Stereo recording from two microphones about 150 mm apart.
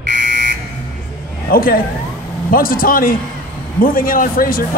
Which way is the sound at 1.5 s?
75° left (ahead or behind).